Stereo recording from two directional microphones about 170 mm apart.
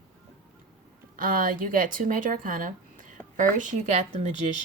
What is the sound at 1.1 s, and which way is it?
Speech, 55° right (ahead or behind).